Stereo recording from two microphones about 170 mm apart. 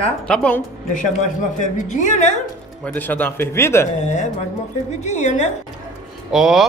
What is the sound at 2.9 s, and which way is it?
Speech, 10° left (ahead or behind).